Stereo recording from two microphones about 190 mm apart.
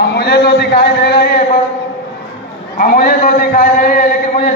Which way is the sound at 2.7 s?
50° left (ahead or behind).